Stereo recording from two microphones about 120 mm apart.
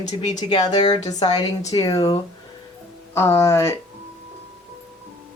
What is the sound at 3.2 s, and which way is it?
Speech, 25° left (ahead or behind).